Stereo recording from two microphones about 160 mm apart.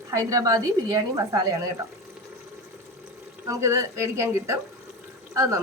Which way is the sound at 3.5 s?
20° right (ahead or behind).